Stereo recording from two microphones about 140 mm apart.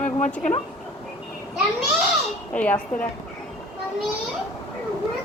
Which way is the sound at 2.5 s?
10° left (ahead or behind).